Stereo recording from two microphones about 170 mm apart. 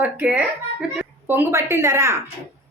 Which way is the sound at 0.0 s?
10° right (ahead or behind).